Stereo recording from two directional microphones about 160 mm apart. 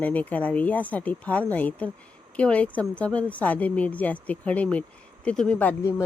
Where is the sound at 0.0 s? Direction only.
10° left (ahead or behind).